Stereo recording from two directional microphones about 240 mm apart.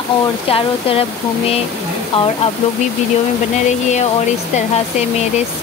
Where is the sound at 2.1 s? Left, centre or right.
Left.